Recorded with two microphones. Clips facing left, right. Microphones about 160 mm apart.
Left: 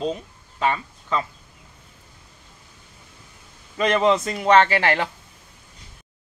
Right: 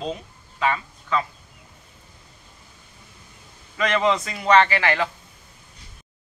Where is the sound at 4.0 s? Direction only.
35° left (ahead or behind).